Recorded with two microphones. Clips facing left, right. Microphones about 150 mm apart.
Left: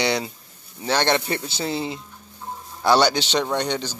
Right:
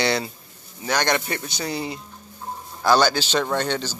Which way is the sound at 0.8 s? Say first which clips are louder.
Left 2 dB; 30° left (ahead or behind).